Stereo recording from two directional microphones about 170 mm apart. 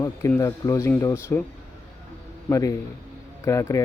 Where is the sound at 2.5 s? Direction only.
20° left (ahead or behind).